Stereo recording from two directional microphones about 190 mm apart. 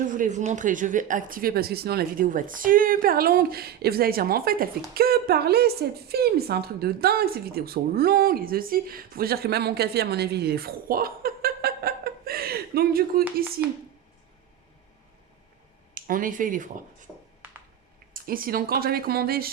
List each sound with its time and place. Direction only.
0.0 s a woman's voice: 40° right (ahead or behind)
16.0 s speech: 45° right (ahead or behind)
18.1 s a woman's voice: 50° right (ahead or behind)